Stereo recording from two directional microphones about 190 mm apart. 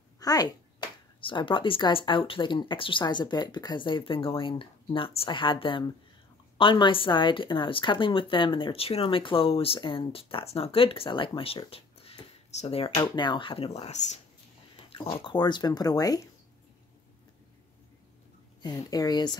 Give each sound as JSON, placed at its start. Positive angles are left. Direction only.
{"t": 0.2, "sound": "a woman's voice", "side_deg": 20}
{"t": 18.6, "sound": "a woman's voice", "side_deg": 20}